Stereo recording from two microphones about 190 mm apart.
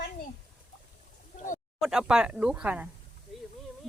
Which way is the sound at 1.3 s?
45° left (ahead or behind).